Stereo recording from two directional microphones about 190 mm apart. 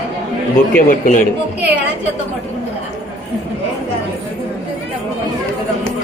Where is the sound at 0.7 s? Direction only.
45° left (ahead or behind).